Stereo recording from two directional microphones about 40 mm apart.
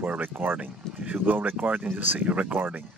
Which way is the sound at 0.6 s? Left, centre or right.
Right.